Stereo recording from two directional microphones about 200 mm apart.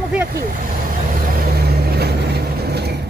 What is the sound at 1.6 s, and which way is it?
Vehicle, 50° right (ahead or behind).